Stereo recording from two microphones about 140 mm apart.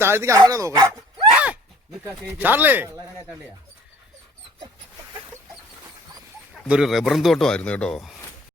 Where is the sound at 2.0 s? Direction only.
15° right (ahead or behind).